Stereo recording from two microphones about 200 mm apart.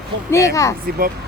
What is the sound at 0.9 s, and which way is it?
Speech, 50° right (ahead or behind).